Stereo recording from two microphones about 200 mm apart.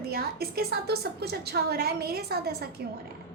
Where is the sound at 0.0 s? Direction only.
50° right (ahead or behind).